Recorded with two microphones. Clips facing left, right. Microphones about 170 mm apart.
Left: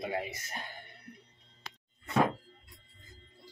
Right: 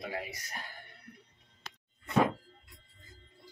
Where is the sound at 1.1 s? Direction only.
20° left (ahead or behind).